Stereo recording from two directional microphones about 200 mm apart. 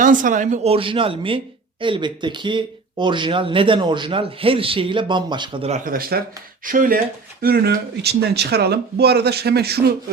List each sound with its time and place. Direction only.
0.0 s speech: 40° right (ahead or behind)